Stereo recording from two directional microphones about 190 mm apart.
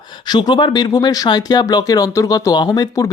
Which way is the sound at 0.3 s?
25° left (ahead or behind).